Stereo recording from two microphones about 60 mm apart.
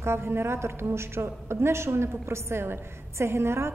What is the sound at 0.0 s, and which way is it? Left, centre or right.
A woman's voice, right.